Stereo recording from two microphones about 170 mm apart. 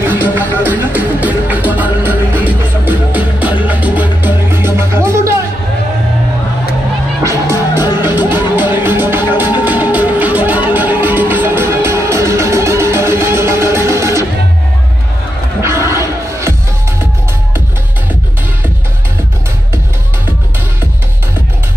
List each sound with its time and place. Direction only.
0.3 s music: 10° right (ahead or behind)
7.2 s music: 15° right (ahead or behind)
15.9 s music: 15° right (ahead or behind)